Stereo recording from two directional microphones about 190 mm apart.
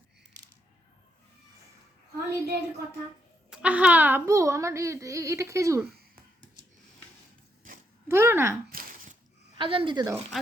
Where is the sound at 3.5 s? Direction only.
5° right (ahead or behind).